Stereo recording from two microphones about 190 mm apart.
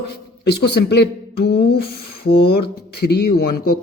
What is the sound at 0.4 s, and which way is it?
A woman's voice, 60° left (ahead or behind).